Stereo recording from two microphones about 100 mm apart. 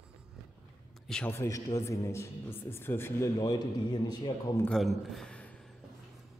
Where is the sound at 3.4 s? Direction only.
40° left (ahead or behind).